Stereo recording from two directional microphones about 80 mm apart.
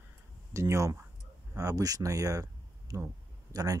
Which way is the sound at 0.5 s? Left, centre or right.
Right.